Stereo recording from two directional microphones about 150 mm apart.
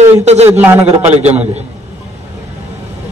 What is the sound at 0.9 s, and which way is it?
Speech, 45° right (ahead or behind).